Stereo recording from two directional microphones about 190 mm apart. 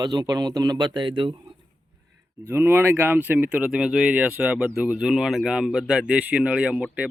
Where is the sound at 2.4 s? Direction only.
10° right (ahead or behind).